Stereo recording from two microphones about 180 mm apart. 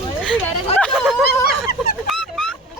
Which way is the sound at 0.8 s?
Centre (ahead or behind).